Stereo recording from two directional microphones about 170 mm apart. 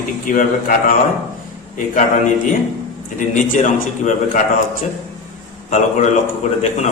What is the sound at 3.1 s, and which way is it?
A man's voice, 50° left (ahead or behind).